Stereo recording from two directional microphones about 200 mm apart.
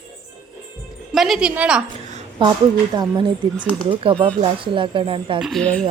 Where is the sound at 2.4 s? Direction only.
25° right (ahead or behind).